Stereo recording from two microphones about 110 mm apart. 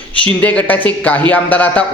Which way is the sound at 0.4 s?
15° left (ahead or behind).